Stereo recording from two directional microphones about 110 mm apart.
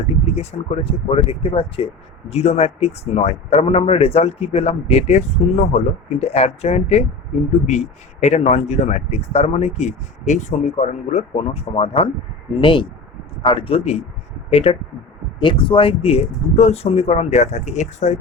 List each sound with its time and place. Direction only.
0.3 s speech: 65° left (ahead or behind)
2.3 s a man's voice: 75° left (ahead or behind)
7.7 s speech: 90° left; by 14.8 s 60° left (ahead or behind)
15.4 s a man's voice: 45° left (ahead or behind); by 18.2 s 90° left